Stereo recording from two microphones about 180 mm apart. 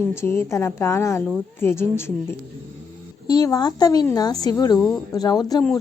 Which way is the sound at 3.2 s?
20° left (ahead or behind).